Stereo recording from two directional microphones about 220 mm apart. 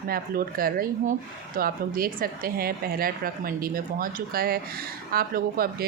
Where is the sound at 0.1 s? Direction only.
40° right (ahead or behind).